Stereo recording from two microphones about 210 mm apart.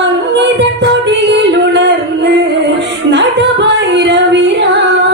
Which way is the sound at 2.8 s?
55° right (ahead or behind).